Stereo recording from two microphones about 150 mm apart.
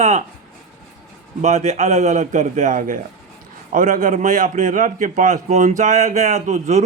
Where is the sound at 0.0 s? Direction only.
50° right (ahead or behind).